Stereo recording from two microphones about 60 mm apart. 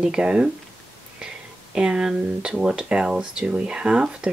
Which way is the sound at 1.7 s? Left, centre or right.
Centre.